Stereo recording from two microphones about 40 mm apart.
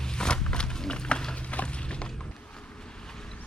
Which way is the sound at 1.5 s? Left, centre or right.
Left.